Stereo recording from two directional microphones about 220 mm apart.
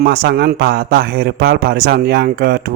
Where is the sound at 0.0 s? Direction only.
45° right (ahead or behind).